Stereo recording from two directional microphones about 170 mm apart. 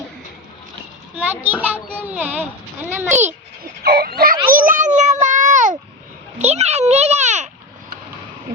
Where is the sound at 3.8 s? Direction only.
65° right (ahead or behind); by 7.4 s 45° right (ahead or behind).